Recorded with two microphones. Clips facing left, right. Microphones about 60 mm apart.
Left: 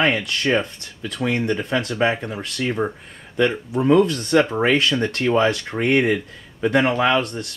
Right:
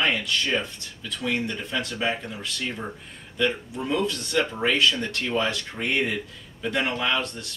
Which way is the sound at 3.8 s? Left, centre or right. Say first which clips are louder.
Left 10 dB; left.